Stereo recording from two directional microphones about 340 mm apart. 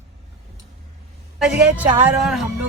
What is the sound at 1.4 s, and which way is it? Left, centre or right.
Speech, centre.